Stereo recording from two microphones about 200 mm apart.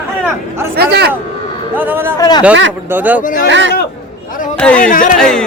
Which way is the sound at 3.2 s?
40° left (ahead or behind).